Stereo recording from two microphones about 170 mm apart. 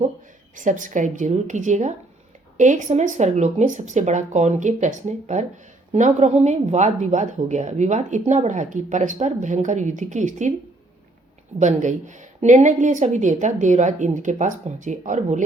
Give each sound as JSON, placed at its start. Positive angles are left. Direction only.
{"t": 0.5, "sound": "speech", "side_deg": -50}
{"t": 11.6, "sound": "speech", "side_deg": -45}